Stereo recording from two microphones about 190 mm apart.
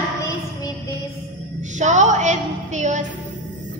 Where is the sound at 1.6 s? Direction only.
40° right (ahead or behind).